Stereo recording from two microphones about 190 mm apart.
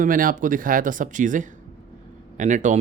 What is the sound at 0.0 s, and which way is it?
Speech, 45° right (ahead or behind).